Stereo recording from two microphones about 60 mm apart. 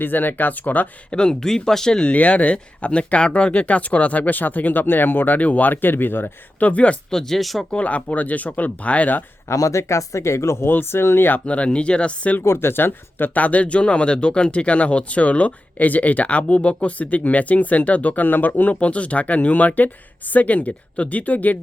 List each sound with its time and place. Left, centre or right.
0.0 s speech: left
1.1 s speech: centre
7.1 s speech: centre
7.7 s speech: left
9.5 s speech: left
10.7 s speech: left
11.4 s speech: left
12.4 s speech: left